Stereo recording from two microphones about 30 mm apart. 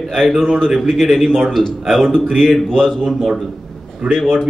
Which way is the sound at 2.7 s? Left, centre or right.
Left.